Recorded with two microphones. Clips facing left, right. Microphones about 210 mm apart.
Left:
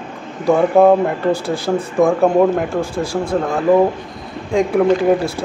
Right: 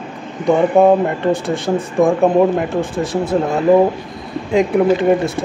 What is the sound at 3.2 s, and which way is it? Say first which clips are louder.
Speech: right 2 dB; 25° right (ahead or behind).